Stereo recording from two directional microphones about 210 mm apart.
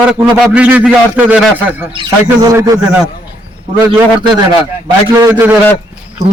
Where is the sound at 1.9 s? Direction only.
20° right (ahead or behind).